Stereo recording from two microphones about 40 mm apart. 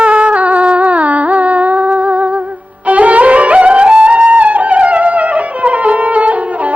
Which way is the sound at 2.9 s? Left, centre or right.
Right.